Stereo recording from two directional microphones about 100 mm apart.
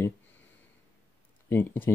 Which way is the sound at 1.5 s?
20° left (ahead or behind).